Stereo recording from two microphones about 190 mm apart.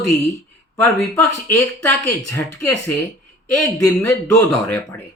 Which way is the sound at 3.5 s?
5° left (ahead or behind).